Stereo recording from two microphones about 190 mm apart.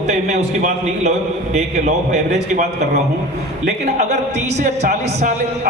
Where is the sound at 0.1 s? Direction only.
40° right (ahead or behind).